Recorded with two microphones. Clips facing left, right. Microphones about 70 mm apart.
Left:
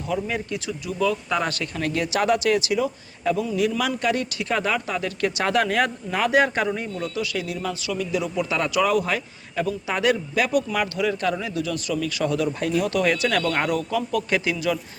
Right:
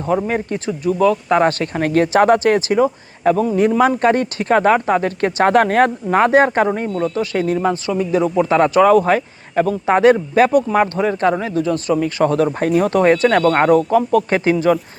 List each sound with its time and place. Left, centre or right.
0.0 s speech: right